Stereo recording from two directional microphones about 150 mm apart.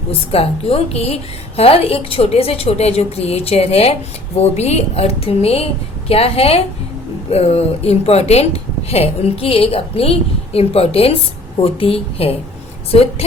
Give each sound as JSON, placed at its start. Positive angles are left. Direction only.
{"t": 0.3, "sound": "a woman's voice", "side_deg": 40}